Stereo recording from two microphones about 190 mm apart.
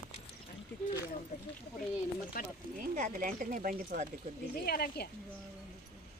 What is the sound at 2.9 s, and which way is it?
Speech, 45° right (ahead or behind).